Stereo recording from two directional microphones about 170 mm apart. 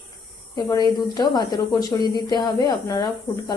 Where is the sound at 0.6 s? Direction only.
20° left (ahead or behind).